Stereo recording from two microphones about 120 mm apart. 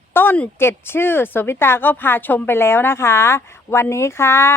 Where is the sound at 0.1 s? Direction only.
15° left (ahead or behind).